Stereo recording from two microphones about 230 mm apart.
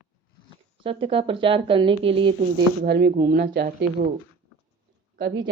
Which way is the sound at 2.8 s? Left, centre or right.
Right.